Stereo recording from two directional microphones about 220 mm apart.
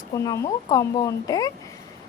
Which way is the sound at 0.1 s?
15° left (ahead or behind).